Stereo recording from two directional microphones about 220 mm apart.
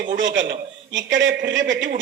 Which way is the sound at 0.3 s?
50° right (ahead or behind).